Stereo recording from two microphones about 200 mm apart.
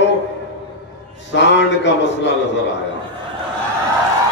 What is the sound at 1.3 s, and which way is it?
Speech, 65° left (ahead or behind).